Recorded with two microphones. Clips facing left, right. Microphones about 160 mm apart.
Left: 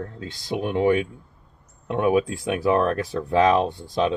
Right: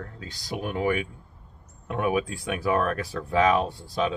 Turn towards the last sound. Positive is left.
turn(degrees=20)  # may be behind; listen again after turning